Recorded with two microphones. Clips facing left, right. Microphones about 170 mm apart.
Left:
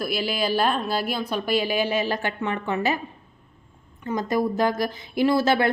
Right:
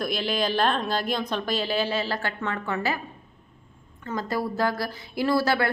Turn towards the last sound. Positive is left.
turn(degrees=20)  # may be behind; listen again after turning